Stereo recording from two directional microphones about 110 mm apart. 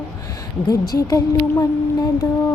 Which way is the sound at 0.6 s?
30° left (ahead or behind).